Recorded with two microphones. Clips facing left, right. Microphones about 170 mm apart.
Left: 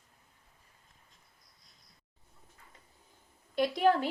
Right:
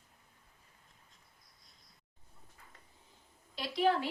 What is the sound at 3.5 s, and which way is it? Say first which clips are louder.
Speech: left 4 dB; 50° left (ahead or behind).